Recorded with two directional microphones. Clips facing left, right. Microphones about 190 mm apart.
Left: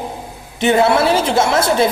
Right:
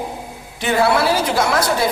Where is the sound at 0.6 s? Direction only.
25° left (ahead or behind).